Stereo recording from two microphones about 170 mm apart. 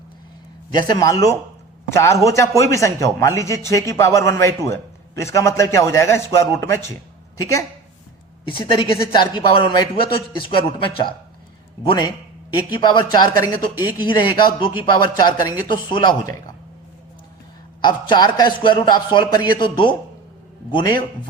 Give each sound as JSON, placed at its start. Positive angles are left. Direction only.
{"t": 0.9, "sound": "a man's voice", "side_deg": 20}
{"t": 8.4, "sound": "a man's voice", "side_deg": 30}
{"t": 17.8, "sound": "a man's voice", "side_deg": 25}